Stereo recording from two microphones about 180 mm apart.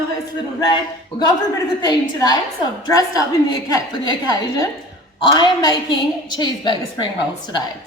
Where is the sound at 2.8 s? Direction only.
20° left (ahead or behind).